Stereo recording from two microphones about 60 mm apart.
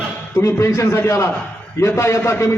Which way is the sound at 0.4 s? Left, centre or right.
Left.